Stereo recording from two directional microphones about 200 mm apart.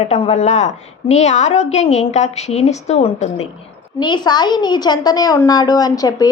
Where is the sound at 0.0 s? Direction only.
35° left (ahead or behind).